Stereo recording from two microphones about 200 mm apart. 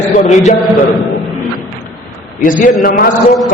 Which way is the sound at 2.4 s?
40° left (ahead or behind).